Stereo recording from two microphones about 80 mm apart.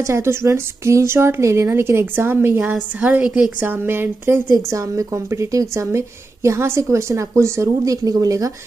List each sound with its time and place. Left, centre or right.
0.0 s a woman's voice: right; by 3.6 s centre
3.6 s speech: right
4.6 s a woman's voice: right